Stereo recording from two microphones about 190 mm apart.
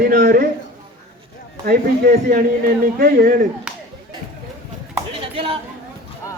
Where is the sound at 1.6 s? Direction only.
50° right (ahead or behind).